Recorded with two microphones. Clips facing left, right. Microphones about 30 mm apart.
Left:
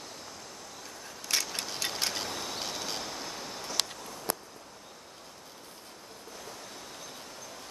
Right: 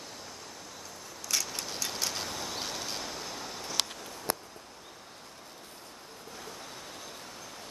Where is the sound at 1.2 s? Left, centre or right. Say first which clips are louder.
Left 1 dB; left.